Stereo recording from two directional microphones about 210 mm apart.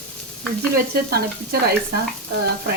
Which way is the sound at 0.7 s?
45° right (ahead or behind).